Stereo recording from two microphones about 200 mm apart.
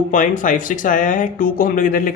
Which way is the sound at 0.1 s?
40° left (ahead or behind).